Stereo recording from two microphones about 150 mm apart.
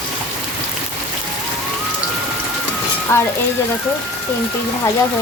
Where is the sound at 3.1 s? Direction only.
15° left (ahead or behind).